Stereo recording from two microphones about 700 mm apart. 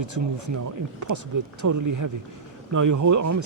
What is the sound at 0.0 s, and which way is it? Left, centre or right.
Speech, right.